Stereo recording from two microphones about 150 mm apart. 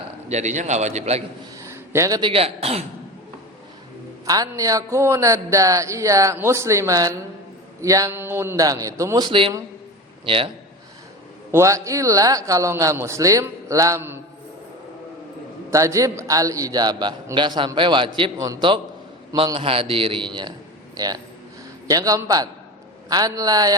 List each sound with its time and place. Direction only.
0.3 s a man's voice: 50° right (ahead or behind)
1.5 s a sound: 20° right (ahead or behind)
2.3 s speech: 40° right (ahead or behind)
4.3 s a man's voice: 25° right (ahead or behind)
11.5 s a man's voice: 20° right (ahead or behind)
15.7 s a man's voice: 20° right (ahead or behind)